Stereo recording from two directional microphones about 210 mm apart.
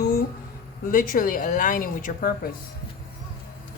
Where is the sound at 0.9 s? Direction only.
40° left (ahead or behind).